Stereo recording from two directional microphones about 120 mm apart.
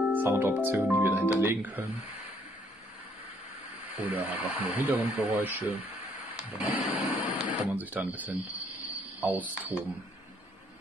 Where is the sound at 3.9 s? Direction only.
15° right (ahead or behind).